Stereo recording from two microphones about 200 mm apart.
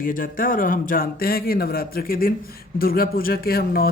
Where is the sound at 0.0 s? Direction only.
45° left (ahead or behind).